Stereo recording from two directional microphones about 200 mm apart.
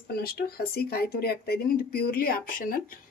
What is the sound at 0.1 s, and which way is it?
Speech, 50° left (ahead or behind).